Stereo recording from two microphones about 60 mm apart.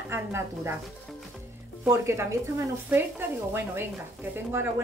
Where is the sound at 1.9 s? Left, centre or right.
Right.